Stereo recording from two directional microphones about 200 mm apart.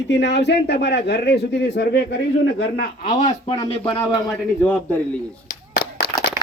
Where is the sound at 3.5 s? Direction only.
25° left (ahead or behind).